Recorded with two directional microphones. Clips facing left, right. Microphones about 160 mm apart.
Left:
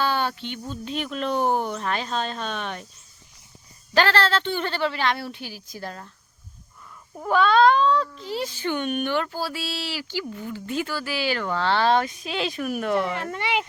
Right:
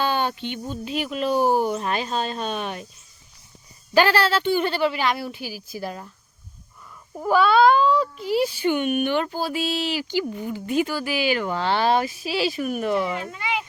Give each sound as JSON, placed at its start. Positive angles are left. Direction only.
{"t": 0.0, "sound": "speech", "side_deg": -15}
{"t": 3.9, "sound": "speech", "side_deg": -10}
{"t": 7.2, "sound": "speech", "side_deg": -5}
{"t": 13.2, "sound": "speech", "side_deg": 75}